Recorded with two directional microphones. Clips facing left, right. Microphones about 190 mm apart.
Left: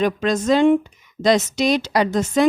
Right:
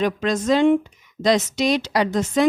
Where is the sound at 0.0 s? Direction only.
45° left (ahead or behind).